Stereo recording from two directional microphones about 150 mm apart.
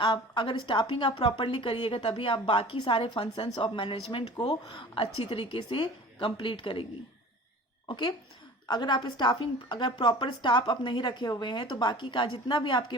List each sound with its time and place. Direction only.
0.0 s a woman's voice: 35° left (ahead or behind)
7.9 s a woman's voice: 30° left (ahead or behind)